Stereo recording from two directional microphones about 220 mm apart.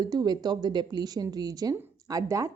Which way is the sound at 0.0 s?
15° right (ahead or behind).